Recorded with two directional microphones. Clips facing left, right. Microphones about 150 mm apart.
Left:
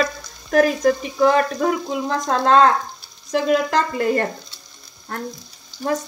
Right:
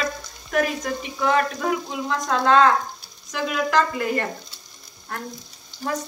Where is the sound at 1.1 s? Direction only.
35° left (ahead or behind).